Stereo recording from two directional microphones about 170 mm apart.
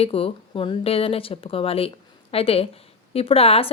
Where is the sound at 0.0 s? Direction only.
35° left (ahead or behind).